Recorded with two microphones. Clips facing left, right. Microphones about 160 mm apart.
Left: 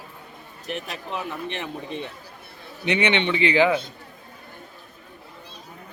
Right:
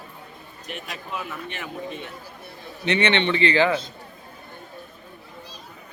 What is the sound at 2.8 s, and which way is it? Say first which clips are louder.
A man's voice: right 1 dB; 15° left (ahead or behind).